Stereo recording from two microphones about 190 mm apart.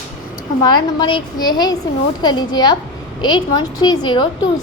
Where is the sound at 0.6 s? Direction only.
25° left (ahead or behind).